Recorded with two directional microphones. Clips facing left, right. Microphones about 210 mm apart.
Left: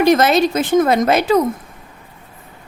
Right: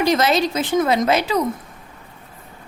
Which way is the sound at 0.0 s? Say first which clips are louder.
Left 5 dB; 55° left (ahead or behind).